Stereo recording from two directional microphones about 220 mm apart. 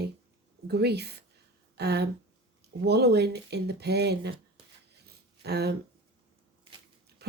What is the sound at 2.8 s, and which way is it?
Speech, 50° right (ahead or behind).